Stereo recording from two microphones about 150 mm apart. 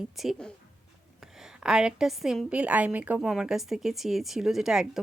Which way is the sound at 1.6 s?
5° right (ahead or behind).